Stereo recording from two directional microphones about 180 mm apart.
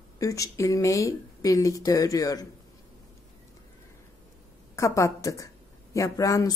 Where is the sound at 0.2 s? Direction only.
20° left (ahead or behind).